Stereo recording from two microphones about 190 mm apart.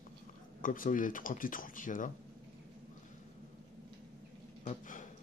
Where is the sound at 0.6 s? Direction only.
45° left (ahead or behind).